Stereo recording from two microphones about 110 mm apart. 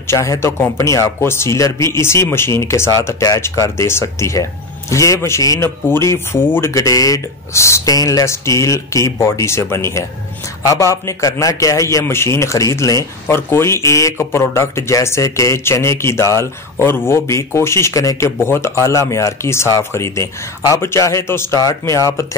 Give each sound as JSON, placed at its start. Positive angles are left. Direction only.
{"t": 0.0, "sound": "speech", "side_deg": 25}